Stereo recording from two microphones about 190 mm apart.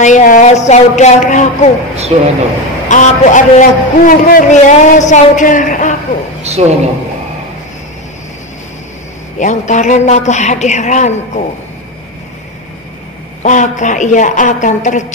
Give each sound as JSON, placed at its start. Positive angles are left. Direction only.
{"t": 0.0, "sound": "a man's voice", "side_deg": 40}
{"t": 2.1, "sound": "a man's voice", "side_deg": -35}
{"t": 2.9, "sound": "a man's voice", "side_deg": 40}
{"t": 6.6, "sound": "a man's voice", "side_deg": -35}
{"t": 9.4, "sound": "a man's voice", "side_deg": 40}
{"t": 13.4, "sound": "a man's voice", "side_deg": 40}